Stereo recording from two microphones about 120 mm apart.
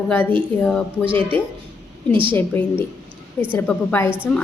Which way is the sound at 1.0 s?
45° right (ahead or behind).